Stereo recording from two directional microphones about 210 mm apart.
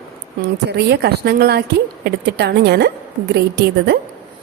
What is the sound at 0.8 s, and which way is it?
Speech, 50° right (ahead or behind).